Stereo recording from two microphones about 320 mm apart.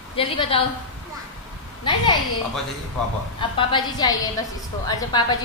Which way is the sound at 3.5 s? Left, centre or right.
Centre.